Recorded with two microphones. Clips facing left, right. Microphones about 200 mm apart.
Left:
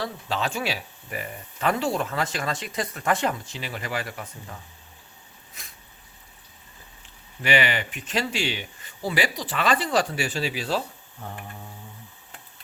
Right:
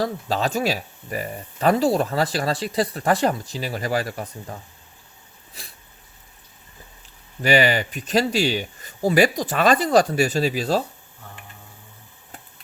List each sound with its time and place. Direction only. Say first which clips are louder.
0.0 s speech: right 5 dB; 40° right (ahead or behind)
5.6 s a sound: right 5 dB; 30° right (ahead or behind)
7.4 s speech: right 6 dB; 35° right (ahead or behind)